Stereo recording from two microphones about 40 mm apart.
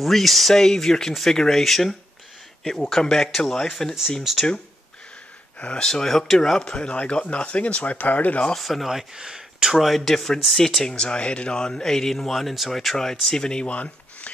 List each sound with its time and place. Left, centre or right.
0.0 s speech: centre
0.6 s speech: centre
4.2 s speech: centre
5.8 s speech: centre
6.6 s speech: left
8.5 s speech: centre
8.8 s speech: centre
9.8 s speech: centre
10.0 s speech: centre
11.0 s speech: left
13.7 s a sound: left